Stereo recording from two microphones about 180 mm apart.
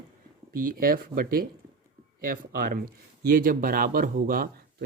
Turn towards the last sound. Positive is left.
turn(degrees=-55)  # may be behind; listen again after turning